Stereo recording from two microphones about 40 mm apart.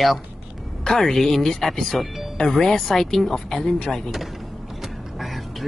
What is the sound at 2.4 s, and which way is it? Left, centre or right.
Speech, centre.